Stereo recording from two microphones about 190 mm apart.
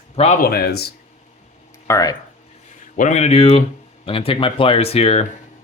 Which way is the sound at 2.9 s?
40° left (ahead or behind).